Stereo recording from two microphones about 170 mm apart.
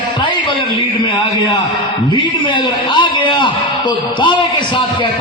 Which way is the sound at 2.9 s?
30° left (ahead or behind).